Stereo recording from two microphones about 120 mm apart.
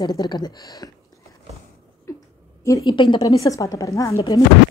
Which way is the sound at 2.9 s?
40° left (ahead or behind).